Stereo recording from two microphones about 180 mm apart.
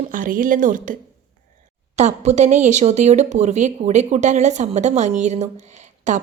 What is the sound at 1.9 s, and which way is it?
Speech, 40° right (ahead or behind).